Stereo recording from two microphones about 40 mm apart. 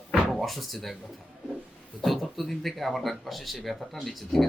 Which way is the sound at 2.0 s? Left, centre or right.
Centre.